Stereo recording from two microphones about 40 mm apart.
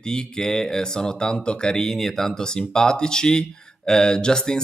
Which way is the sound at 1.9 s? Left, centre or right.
Centre.